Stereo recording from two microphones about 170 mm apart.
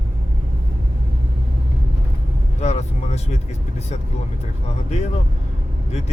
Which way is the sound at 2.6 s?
40° left (ahead or behind).